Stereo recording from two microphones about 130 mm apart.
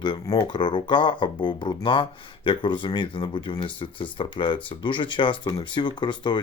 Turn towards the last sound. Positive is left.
turn(degrees=35)  # may be behind; listen again after turning